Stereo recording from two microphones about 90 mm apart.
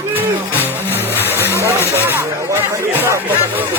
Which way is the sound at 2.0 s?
25° right (ahead or behind).